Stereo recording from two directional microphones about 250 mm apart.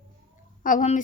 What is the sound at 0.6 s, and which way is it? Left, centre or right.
Speech, left.